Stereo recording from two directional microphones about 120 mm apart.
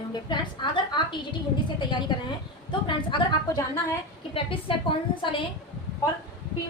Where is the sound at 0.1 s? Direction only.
40° left (ahead or behind).